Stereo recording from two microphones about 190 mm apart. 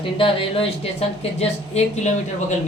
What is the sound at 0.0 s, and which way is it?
Speech, 25° left (ahead or behind).